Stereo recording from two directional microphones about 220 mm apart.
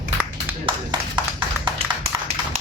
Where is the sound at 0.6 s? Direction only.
20° right (ahead or behind).